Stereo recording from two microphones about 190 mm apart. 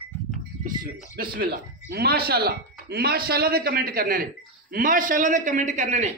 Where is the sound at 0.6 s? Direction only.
45° right (ahead or behind).